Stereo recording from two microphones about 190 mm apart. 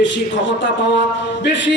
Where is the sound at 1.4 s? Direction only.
70° left (ahead or behind).